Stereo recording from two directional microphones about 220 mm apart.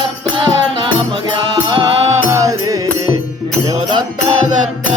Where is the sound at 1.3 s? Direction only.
20° right (ahead or behind).